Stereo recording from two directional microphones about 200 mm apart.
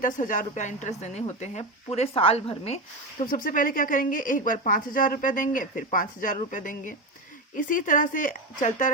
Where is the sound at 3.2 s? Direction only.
45° left (ahead or behind).